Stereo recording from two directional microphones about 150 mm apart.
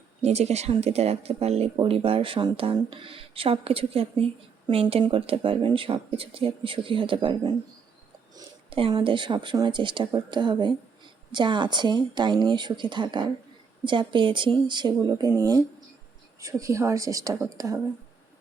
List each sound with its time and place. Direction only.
0.2 s speech: 45° right (ahead or behind)
8.7 s speech: 35° right (ahead or behind)